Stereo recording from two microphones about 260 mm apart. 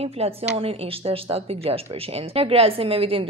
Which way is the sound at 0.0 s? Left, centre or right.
Right.